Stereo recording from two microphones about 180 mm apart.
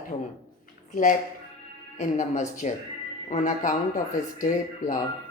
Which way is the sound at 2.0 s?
40° left (ahead or behind).